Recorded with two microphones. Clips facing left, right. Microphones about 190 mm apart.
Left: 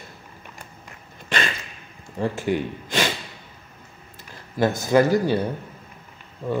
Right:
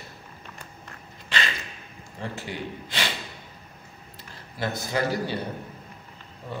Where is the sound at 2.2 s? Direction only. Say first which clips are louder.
Left 10 dB; 45° left (ahead or behind).